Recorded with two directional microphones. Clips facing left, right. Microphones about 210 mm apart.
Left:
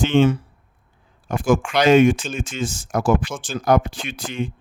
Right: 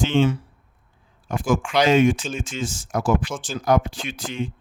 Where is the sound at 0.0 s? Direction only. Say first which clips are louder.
Left 3 dB; 60° left (ahead or behind).